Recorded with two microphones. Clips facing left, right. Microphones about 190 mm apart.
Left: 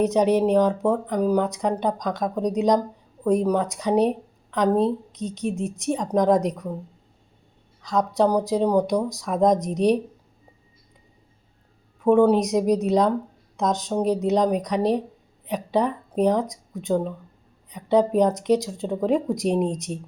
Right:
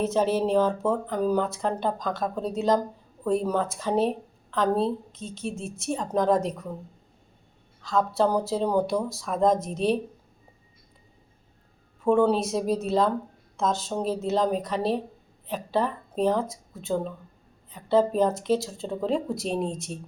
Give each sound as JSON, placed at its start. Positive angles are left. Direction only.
{"t": 0.0, "sound": "speech", "side_deg": 15}
{"t": 7.8, "sound": "speech", "side_deg": 15}
{"t": 12.0, "sound": "speech", "side_deg": 15}